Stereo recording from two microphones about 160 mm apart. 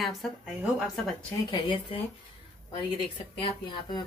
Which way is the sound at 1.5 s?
30° left (ahead or behind).